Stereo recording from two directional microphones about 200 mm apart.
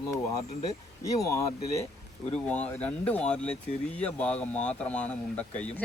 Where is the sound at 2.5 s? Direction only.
5° left (ahead or behind).